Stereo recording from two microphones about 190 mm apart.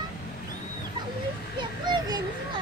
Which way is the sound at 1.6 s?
25° right (ahead or behind).